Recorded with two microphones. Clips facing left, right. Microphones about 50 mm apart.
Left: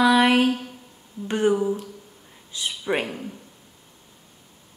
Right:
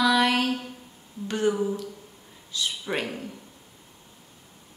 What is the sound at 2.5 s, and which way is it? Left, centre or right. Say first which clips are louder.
Speech: left 3 dB; left.